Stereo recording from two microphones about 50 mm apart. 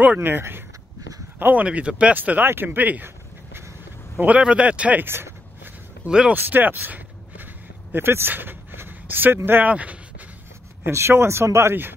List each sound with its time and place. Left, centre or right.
0.2 s speech: right
1.4 s speech: right
2.1 s speech: right
2.4 s speech: right
4.4 s speech: right
5.0 s a sound: right
6.0 s speech: centre
6.3 s speech: right
7.9 s speech: right
9.7 s speech: right
10.9 s speech: right